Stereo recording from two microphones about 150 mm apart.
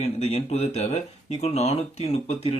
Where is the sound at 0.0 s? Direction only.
45° left (ahead or behind).